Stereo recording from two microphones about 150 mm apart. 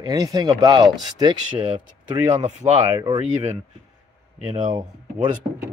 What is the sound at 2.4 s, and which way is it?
Speech, 50° right (ahead or behind).